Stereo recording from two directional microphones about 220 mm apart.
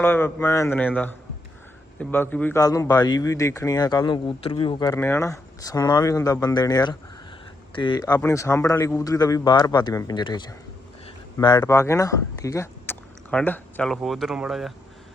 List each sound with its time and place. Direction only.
0.0 s a man's voice: 10° left (ahead or behind)